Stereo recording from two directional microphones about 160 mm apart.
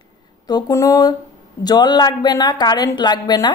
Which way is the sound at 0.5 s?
25° left (ahead or behind).